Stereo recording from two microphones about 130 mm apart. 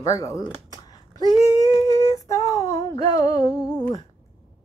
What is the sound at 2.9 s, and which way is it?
Humming, 35° left (ahead or behind).